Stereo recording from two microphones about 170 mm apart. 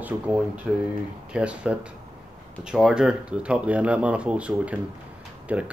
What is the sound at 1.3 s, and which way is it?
Speech, 5° right (ahead or behind).